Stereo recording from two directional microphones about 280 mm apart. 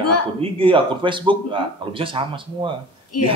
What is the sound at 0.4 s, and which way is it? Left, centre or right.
Speech, centre.